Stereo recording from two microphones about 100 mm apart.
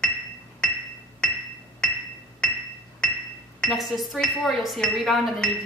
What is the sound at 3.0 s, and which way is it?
Chink, 10° left (ahead or behind).